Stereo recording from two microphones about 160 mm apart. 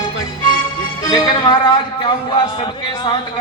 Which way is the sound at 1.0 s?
25° left (ahead or behind).